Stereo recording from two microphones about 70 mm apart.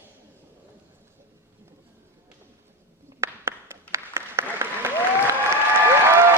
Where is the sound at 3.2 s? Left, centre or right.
Right.